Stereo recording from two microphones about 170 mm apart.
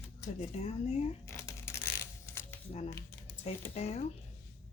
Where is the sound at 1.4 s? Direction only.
15° left (ahead or behind).